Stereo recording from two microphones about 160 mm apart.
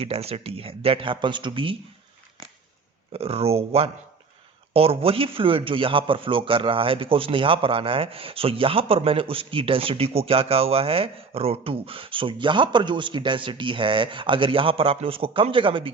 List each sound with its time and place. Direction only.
0.0 s a man's voice: 40° right (ahead or behind)
3.1 s a man's voice: 40° right (ahead or behind)